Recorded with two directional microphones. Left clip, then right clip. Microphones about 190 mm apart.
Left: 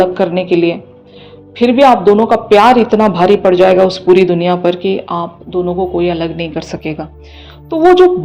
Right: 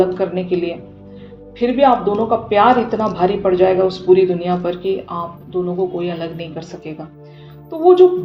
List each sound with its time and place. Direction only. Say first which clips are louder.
0.0 s a man's voice: left 5 dB; 55° left (ahead or behind)